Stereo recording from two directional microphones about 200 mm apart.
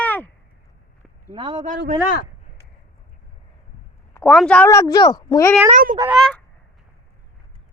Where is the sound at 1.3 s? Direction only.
25° right (ahead or behind).